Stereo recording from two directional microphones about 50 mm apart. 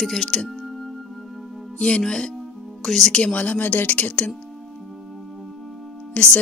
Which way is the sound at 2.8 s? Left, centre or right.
Centre.